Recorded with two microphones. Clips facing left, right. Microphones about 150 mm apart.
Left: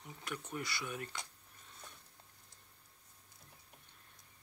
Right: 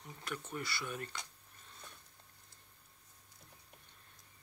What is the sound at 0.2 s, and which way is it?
Speech, 15° left (ahead or behind).